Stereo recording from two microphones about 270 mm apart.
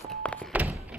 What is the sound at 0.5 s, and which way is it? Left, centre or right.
Thunk, centre.